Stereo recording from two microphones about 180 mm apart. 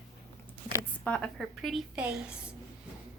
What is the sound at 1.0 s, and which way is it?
A woman's voice, 5° left (ahead or behind).